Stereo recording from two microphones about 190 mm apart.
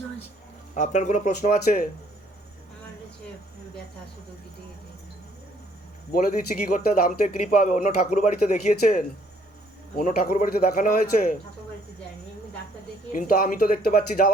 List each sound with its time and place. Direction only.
0.7 s speech: 40° left (ahead or behind)
6.1 s speech: 45° left (ahead or behind)
13.1 s speech: 50° left (ahead or behind)